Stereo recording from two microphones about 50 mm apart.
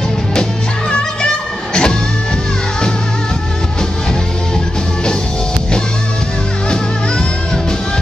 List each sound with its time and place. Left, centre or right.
0.3 s music: centre